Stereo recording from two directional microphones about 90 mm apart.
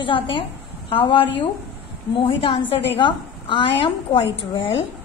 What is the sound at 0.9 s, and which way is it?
A woman's voice, 75° left (ahead or behind).